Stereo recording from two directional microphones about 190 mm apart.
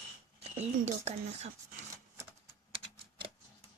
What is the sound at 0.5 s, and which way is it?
Speech, 35° right (ahead or behind).